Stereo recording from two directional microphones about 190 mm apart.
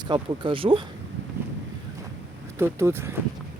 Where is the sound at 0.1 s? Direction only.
25° right (ahead or behind).